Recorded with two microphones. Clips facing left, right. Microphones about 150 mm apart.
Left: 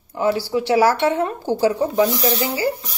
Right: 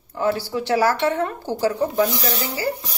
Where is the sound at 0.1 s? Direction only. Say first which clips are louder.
Left 3 dB; 15° left (ahead or behind).